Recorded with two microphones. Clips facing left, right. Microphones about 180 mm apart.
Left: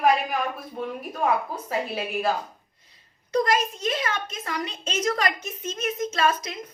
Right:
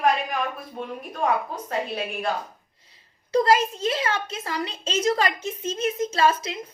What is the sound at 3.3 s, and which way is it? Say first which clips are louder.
A child's voice: right 3 dB; 30° right (ahead or behind).